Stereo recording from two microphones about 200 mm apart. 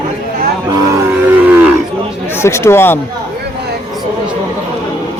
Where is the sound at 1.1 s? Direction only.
10° right (ahead or behind).